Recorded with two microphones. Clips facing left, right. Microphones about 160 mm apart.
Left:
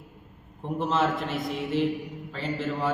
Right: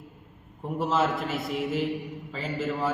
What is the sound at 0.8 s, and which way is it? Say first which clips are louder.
A man's voice: even; 5° right (ahead or behind).